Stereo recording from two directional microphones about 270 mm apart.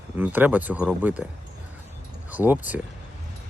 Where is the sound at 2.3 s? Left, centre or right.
Centre.